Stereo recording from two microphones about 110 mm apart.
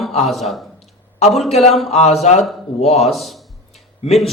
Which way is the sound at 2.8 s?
75° left (ahead or behind).